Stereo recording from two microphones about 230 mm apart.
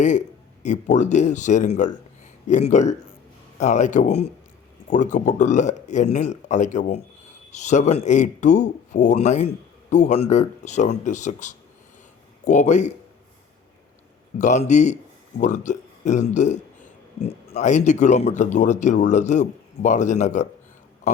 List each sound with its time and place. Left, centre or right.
0.6 s speech: left
14.3 s speech: left